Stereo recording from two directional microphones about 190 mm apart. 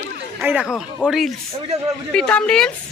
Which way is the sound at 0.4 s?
5° right (ahead or behind).